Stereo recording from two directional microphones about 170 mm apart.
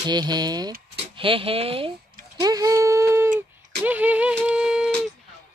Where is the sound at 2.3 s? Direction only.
20° right (ahead or behind); by 5.1 s 5° right (ahead or behind).